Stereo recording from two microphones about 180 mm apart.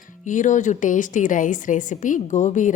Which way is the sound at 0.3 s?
45° left (ahead or behind).